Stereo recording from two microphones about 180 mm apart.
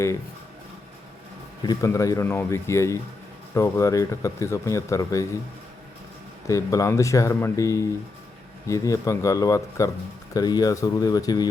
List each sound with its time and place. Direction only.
1.6 s speech: 15° left (ahead or behind)
6.5 s speech: 20° left (ahead or behind)